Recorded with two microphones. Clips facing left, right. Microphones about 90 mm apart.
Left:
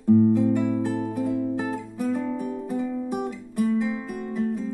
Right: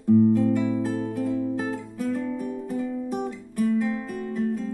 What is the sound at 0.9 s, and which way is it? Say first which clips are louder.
Music: left 1 dB; 20° left (ahead or behind).